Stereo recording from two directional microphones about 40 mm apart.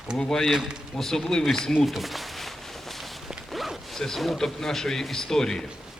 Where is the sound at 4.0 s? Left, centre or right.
Centre.